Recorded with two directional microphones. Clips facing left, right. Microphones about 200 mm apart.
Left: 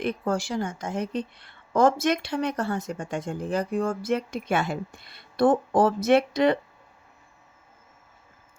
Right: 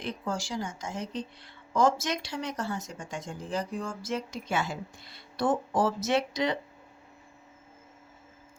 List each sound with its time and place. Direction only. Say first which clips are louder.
0.0 s a woman's voice: left 7 dB; 60° left (ahead or behind)